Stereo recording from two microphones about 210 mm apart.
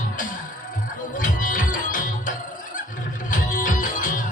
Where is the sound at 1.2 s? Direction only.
40° left (ahead or behind).